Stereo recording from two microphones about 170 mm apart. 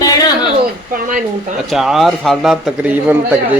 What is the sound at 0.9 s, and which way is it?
Speech, 50° right (ahead or behind).